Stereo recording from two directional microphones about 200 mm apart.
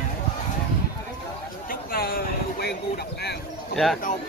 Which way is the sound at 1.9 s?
45° left (ahead or behind).